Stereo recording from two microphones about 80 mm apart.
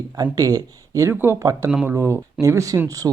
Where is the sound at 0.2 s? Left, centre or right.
Right.